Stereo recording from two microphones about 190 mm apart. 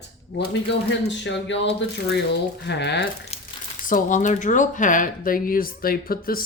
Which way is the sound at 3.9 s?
40° left (ahead or behind).